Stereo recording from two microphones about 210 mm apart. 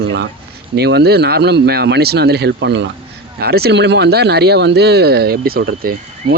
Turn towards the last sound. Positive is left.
turn(degrees=-45)  # may be behind; listen again after turning